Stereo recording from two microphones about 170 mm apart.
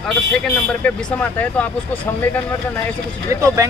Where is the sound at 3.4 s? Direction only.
20° right (ahead or behind).